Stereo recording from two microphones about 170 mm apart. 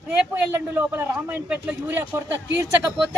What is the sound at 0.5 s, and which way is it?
Speech, 10° right (ahead or behind).